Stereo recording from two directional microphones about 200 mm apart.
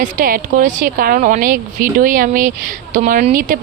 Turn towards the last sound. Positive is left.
turn(degrees=-40)  # may be behind; listen again after turning